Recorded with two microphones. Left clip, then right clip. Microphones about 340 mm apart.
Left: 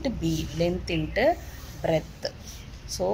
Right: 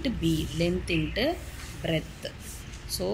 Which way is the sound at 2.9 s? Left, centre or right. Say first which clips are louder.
Left 4 dB; left.